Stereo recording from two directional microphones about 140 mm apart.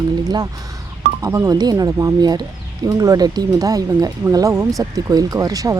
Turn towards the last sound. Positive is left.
turn(degrees=-25)  # may be behind; listen again after turning